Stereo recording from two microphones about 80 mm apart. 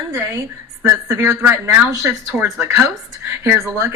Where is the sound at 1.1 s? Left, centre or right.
Right.